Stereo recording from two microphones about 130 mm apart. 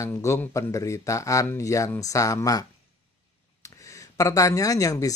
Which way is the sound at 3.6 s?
25° left (ahead or behind).